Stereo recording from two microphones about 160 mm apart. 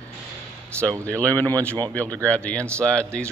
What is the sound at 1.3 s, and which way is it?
Speech, 20° right (ahead or behind).